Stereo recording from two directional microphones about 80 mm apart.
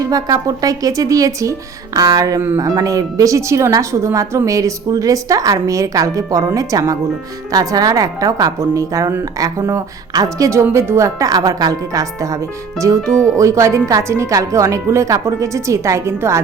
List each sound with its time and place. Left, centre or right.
0.0 s a woman's voice: right
10.6 s a woman's voice: right
13.0 s speech: centre
13.3 s speech: right